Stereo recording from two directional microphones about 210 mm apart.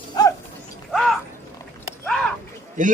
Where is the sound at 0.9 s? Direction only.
Centre (ahead or behind).